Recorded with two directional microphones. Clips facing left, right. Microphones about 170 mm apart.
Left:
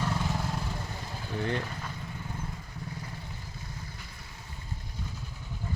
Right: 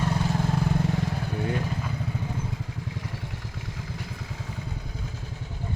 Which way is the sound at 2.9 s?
90° right.